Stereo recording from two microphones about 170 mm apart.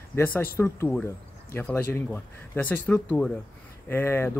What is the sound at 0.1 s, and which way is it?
Speech, 10° left (ahead or behind).